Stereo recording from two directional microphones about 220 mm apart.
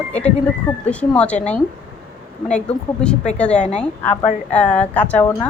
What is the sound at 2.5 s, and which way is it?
Speech, 5° left (ahead or behind).